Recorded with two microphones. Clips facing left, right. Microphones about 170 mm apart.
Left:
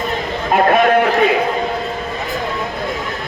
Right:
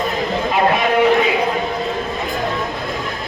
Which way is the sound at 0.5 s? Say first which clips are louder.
Left 5 dB; 55° left (ahead or behind).